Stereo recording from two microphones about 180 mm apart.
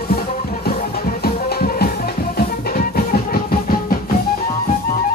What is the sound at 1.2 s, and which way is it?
Music, 60° left (ahead or behind).